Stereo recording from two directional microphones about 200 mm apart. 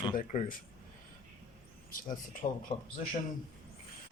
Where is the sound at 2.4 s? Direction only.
30° left (ahead or behind).